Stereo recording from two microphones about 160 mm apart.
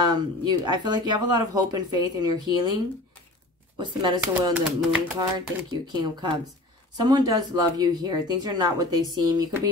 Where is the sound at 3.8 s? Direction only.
30° right (ahead or behind).